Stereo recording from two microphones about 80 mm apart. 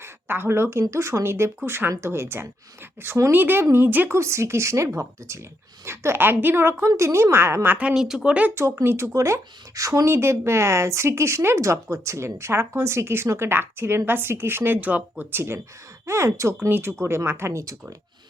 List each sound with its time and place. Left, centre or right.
0.0 s speech: right
3.3 s a woman's voice: right
4.2 s speech: right
7.8 s speech: centre
8.5 s speech: right
10.1 s a woman's voice: right